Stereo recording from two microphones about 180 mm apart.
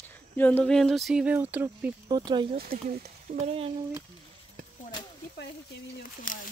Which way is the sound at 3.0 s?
35° right (ahead or behind).